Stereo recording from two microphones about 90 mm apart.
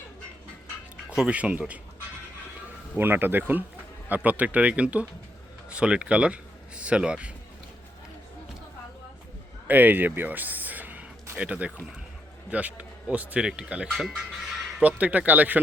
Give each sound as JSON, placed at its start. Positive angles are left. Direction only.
{"t": 1.1, "sound": "speech", "side_deg": -10}
{"t": 2.9, "sound": "speech", "side_deg": -20}
{"t": 9.6, "sound": "speech", "side_deg": -20}